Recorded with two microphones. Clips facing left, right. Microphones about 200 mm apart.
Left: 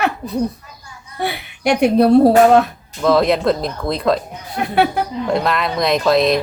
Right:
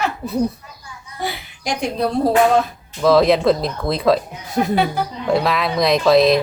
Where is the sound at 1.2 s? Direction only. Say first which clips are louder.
Left 6 dB; 65° left (ahead or behind).